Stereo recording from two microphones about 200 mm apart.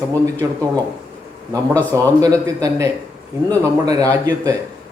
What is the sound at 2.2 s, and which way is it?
Speech, 20° right (ahead or behind).